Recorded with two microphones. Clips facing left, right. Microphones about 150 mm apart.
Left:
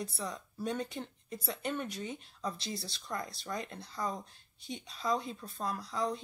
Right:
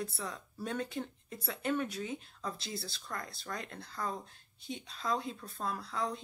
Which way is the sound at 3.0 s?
20° left (ahead or behind).